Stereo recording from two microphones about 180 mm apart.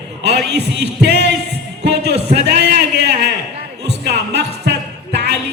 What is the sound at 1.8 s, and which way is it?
Music, 65° right (ahead or behind).